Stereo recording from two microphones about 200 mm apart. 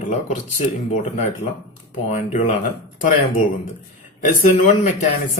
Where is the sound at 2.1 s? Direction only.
40° left (ahead or behind).